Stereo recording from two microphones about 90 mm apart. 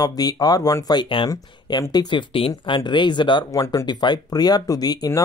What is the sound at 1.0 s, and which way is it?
Speech, 70° left (ahead or behind).